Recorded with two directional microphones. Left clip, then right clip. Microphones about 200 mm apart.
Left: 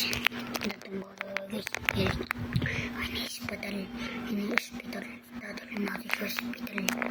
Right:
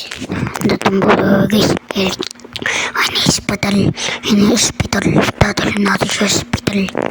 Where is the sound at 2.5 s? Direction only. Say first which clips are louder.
Right 17 dB; 50° right (ahead or behind).